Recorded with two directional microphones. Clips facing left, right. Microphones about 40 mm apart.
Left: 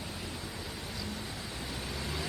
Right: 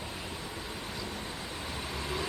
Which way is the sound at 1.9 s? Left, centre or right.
Centre.